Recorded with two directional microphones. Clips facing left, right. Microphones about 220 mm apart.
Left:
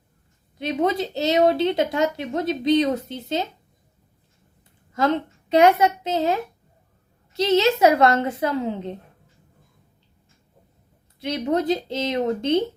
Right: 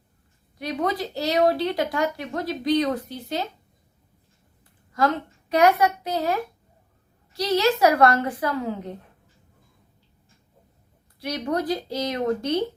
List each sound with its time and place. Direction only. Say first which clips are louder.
0.6 s speech: left 4 dB; 25° left (ahead or behind)
4.9 s speech: left 2 dB; 25° left (ahead or behind)
11.2 s speech: left 3 dB; 25° left (ahead or behind)